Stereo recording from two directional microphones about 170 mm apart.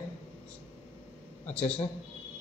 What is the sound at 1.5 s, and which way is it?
Speech, 10° left (ahead or behind).